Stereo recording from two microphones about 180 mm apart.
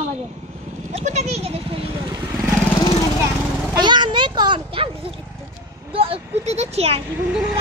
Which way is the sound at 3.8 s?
25° right (ahead or behind).